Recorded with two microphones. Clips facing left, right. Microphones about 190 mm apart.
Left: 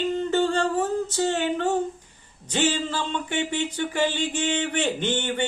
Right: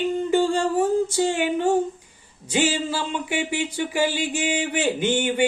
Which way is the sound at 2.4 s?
10° right (ahead or behind).